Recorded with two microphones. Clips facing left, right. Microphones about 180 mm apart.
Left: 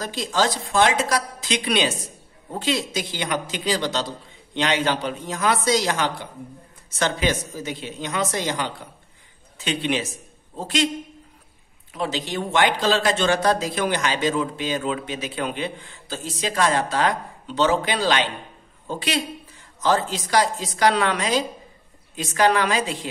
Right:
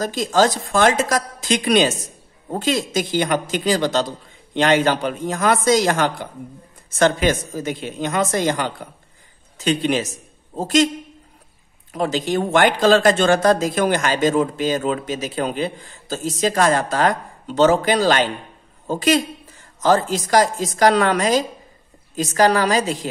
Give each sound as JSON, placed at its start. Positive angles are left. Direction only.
{"t": 0.0, "sound": "a woman's voice", "side_deg": -45}
{"t": 11.9, "sound": "a woman's voice", "side_deg": -45}